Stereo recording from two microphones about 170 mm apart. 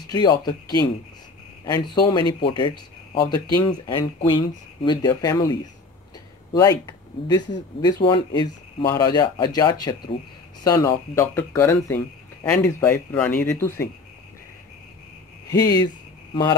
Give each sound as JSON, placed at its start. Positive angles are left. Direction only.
{"t": 0.1, "sound": "speech", "side_deg": 25}
{"t": 15.5, "sound": "speech", "side_deg": 25}